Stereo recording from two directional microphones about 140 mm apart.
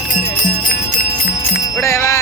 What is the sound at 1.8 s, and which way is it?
Music, 20° left (ahead or behind).